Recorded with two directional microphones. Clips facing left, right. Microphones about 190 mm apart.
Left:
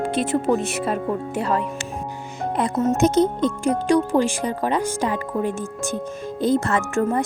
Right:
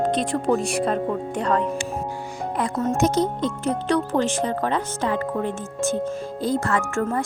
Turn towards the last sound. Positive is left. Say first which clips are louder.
# left 2 dB
turn(degrees=20)  # may be behind; listen again after turning